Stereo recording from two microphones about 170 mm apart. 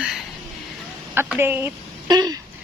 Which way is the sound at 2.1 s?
25° right (ahead or behind).